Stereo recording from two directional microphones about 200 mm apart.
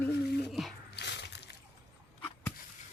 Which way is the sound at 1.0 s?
60° left (ahead or behind).